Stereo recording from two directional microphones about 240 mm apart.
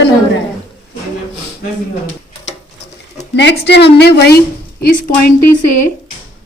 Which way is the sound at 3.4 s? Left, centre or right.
Left.